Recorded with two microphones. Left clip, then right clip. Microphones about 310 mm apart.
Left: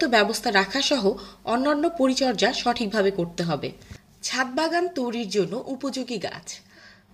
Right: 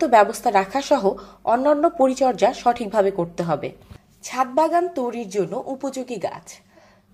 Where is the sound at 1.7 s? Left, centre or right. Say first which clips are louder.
Right 5 dB; right.